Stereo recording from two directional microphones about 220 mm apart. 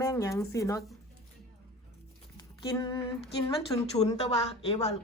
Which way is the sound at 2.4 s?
15° left (ahead or behind).